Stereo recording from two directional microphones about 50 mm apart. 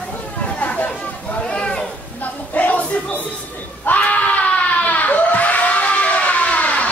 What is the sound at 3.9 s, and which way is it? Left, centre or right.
Screaming, left.